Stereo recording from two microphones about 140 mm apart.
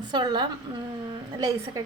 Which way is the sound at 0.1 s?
30° right (ahead or behind).